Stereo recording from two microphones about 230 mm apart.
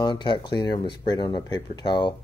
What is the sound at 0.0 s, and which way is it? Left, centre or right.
Speech, left.